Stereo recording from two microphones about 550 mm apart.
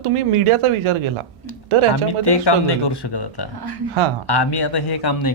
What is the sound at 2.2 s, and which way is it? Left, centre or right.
Speech, left.